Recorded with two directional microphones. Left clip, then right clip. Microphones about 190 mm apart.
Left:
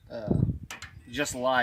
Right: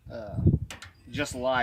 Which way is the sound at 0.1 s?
10° left (ahead or behind).